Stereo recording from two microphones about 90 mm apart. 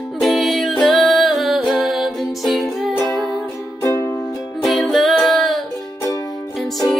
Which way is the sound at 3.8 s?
30° left (ahead or behind).